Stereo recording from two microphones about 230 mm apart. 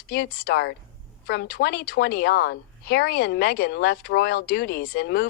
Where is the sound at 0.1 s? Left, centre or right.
Left.